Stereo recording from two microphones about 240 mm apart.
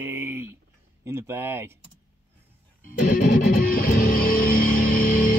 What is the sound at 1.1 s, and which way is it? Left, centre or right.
Speech, centre.